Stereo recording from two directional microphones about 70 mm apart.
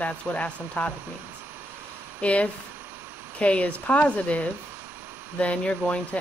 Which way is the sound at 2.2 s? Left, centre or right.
Centre.